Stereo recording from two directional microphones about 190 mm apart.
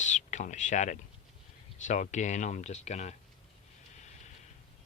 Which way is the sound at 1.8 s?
40° left (ahead or behind).